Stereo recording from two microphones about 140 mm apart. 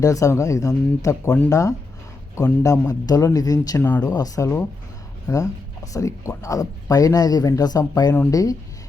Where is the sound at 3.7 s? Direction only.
15° left (ahead or behind).